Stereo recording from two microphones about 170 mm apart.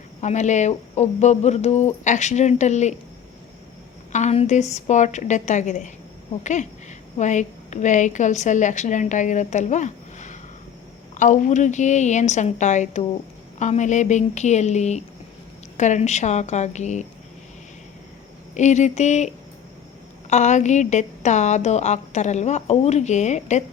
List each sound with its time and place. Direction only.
0.2 s a woman's voice: 45° left (ahead or behind)
4.1 s a woman's voice: 40° left (ahead or behind)
18.5 s a woman's voice: 45° left (ahead or behind)
20.3 s a woman's voice: 45° left (ahead or behind)